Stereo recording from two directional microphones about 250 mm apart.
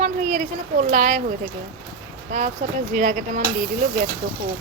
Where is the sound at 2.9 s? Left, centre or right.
Right.